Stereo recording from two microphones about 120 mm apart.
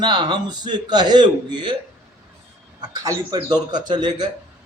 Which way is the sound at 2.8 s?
30° right (ahead or behind).